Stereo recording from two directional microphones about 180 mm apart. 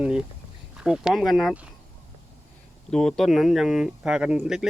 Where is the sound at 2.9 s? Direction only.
5° left (ahead or behind).